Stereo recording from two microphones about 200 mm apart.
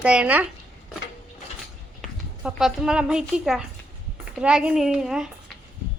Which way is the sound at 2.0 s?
Centre (ahead or behind).